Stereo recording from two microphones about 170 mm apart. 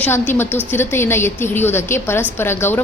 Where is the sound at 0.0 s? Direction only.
10° left (ahead or behind).